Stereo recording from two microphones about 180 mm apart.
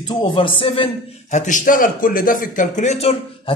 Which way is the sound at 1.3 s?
45° left (ahead or behind).